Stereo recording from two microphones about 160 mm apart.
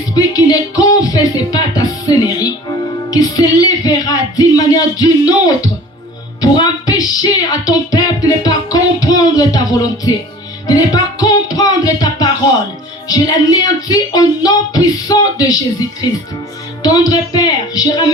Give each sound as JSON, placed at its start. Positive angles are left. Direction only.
{"t": 0.1, "sound": "speech", "side_deg": 25}
{"t": 6.4, "sound": "music", "side_deg": 25}
{"t": 10.7, "sound": "speech", "side_deg": 25}
{"t": 16.8, "sound": "speech", "side_deg": 25}